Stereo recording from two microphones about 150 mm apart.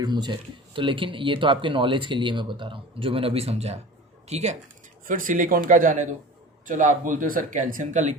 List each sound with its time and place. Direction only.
0.0 s speech: 30° right (ahead or behind); by 4.5 s 50° right (ahead or behind)
5.0 s speech: 65° right (ahead or behind)